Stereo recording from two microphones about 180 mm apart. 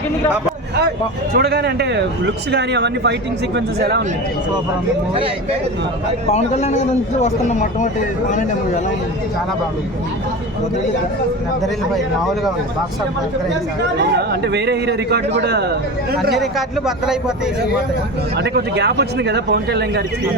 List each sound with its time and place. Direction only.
1.3 s speech: 60° right (ahead or behind)
6.3 s a man's voice: 35° left (ahead or behind)
14.1 s speech: 65° right (ahead or behind)
16.3 s a man's voice: centre (ahead or behind)
18.3 s speech: 65° right (ahead or behind)